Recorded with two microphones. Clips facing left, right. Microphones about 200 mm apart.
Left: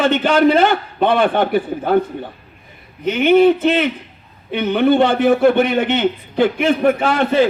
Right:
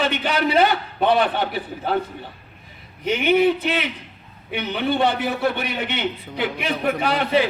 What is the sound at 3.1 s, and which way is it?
A man's voice, 50° left (ahead or behind).